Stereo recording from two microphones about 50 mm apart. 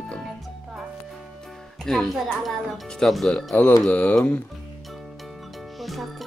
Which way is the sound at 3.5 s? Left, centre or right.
Left.